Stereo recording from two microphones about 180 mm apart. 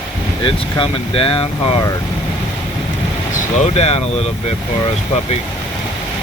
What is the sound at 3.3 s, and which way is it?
Speech, 35° left (ahead or behind).